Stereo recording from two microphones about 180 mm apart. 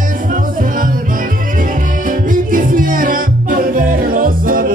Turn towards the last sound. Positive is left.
turn(degrees=-50)  # may be behind; listen again after turning